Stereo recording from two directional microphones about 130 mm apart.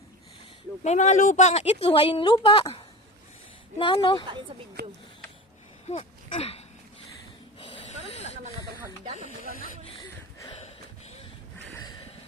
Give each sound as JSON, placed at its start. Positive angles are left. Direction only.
{"t": 0.9, "sound": "a woman's voice", "side_deg": 65}
{"t": 5.9, "sound": "speech", "side_deg": 50}
{"t": 7.6, "sound": "snake", "side_deg": 45}
{"t": 10.0, "sound": "a sound", "side_deg": 45}